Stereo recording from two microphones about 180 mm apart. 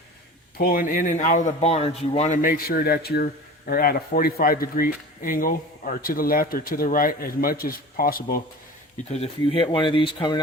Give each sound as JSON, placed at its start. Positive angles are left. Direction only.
{"t": 0.5, "sound": "speech", "side_deg": 55}
{"t": 9.0, "sound": "speech", "side_deg": 30}